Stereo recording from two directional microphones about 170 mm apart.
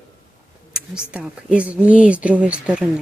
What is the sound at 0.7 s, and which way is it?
Speech, 5° right (ahead or behind).